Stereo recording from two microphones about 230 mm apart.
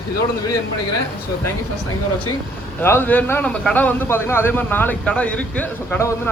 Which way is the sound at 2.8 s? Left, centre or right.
Centre.